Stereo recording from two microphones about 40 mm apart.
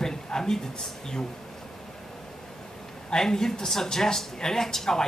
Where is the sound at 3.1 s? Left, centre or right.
Centre.